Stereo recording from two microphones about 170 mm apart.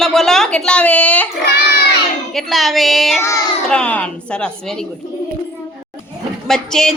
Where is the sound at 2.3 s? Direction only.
Centre (ahead or behind).